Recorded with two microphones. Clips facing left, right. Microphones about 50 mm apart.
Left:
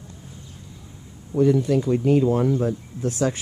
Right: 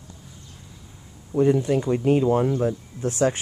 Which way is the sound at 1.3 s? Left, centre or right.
Left.